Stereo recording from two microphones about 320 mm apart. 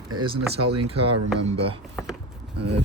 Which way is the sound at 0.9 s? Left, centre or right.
Centre.